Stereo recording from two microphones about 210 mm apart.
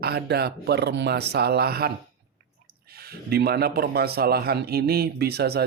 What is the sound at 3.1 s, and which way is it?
Speech, 45° right (ahead or behind).